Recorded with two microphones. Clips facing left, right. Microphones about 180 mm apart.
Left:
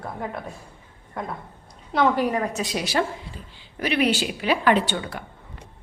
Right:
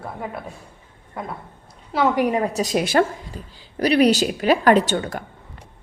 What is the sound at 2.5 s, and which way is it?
Speech, 45° right (ahead or behind).